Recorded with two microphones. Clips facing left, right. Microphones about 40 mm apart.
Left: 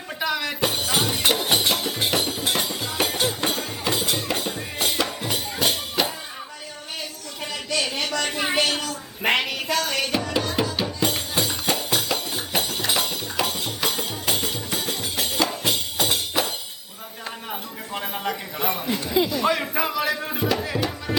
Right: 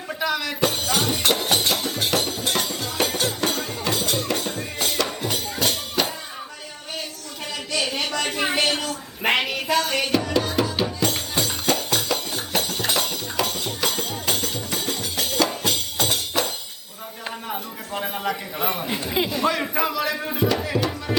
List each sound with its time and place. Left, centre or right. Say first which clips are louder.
0.2 s speech: right 1 dB; centre
1.7 s music: even; centre
7.5 s a sound: even; centre
8.5 s music: even; centre
11.0 s music: even; centre
15.6 s tambourine: even; centre
18.0 s a sound: right 2 dB; centre
18.9 s a sound: left 1 dB; centre
19.5 s music: even; centre